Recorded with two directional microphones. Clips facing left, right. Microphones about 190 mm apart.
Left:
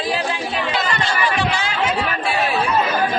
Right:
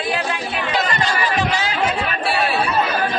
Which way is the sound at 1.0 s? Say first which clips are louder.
Even; 40° right (ahead or behind).